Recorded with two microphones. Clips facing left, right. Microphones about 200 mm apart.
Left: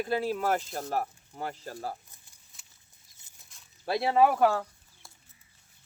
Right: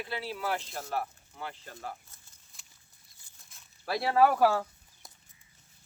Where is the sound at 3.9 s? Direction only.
25° left (ahead or behind).